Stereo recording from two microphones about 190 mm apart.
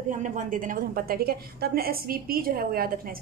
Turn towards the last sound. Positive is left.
turn(degrees=-50)  # may be behind; listen again after turning